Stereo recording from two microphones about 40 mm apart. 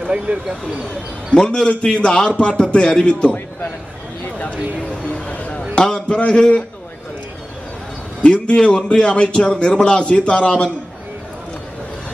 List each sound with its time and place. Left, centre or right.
0.0 s speech: right
0.8 s a man's voice: centre
5.0 s a sound: left
5.8 s a sound: centre
6.0 s a man's voice: left
8.2 s a man's voice: left